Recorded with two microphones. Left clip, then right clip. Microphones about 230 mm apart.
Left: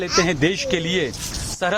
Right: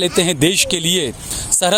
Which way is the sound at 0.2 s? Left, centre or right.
Right.